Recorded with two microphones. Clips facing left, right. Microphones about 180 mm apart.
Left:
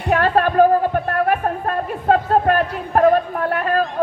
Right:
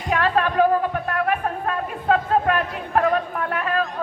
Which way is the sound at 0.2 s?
40° left (ahead or behind).